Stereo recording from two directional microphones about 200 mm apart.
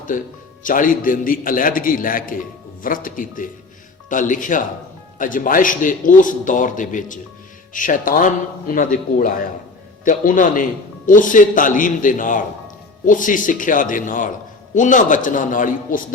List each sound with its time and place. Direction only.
0.1 s a man's voice: 40° left (ahead or behind)